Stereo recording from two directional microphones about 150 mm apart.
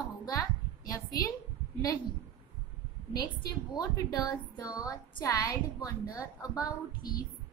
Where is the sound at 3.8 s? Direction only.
25° left (ahead or behind).